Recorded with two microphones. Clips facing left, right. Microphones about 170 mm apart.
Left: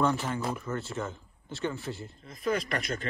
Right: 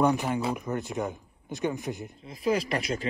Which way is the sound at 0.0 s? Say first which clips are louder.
Right 3 dB; 15° right (ahead or behind).